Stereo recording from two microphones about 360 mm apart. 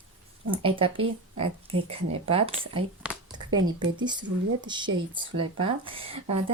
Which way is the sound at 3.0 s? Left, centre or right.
Centre.